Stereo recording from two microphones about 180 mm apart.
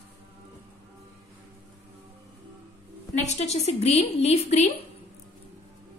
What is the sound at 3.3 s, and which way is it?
A woman's voice, 35° left (ahead or behind).